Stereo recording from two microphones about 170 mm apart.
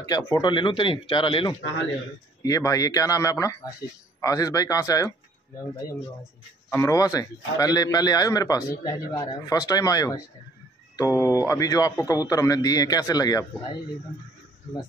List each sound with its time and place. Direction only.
0.3 s a man's voice: 30° left (ahead or behind)
3.8 s a man's voice: 75° left (ahead or behind)
4.2 s a man's voice: 20° left (ahead or behind)
6.7 s a man's voice: 15° left (ahead or behind)